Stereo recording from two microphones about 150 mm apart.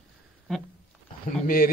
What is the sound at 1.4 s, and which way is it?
Speech, 70° left (ahead or behind).